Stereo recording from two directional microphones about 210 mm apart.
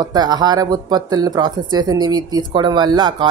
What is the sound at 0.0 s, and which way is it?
Speech, 20° right (ahead or behind).